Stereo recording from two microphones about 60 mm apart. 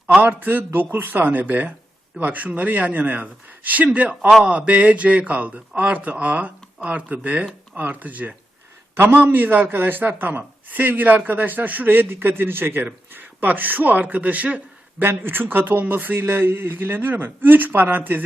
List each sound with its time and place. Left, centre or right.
0.2 s a man's voice: right
14.9 s a man's voice: right
16.2 s a man's voice: right